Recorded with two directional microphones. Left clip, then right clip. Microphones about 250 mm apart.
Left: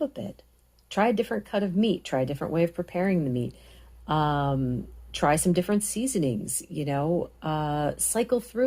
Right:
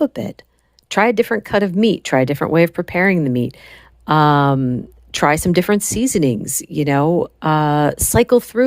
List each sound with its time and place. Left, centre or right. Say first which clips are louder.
0.0 s speech: right 11 dB; right